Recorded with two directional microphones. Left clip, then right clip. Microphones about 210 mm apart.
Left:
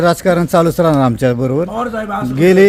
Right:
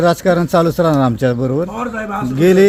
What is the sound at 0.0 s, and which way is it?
A man's voice, centre (ahead or behind).